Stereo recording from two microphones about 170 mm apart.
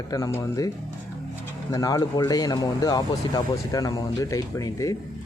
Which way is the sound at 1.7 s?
20° left (ahead or behind).